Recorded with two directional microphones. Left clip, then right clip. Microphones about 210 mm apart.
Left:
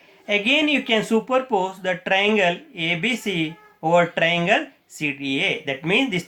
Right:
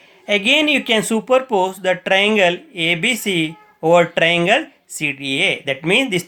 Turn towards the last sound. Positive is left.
turn(degrees=-45)  # may be behind; listen again after turning